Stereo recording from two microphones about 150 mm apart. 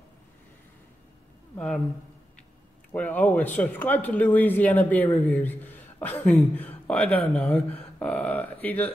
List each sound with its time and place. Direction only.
2.9 s speech: 10° left (ahead or behind)